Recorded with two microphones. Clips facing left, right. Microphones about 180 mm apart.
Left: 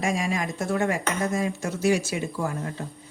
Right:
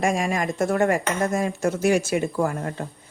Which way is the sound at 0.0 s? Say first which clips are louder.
Right 3 dB; 50° right (ahead or behind).